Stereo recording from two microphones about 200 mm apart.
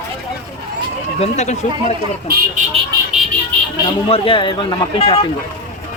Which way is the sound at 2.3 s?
50° right (ahead or behind).